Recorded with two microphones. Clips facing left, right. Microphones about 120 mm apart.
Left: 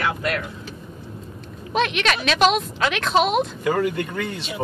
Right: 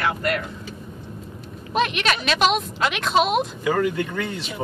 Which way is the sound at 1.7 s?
Centre (ahead or behind).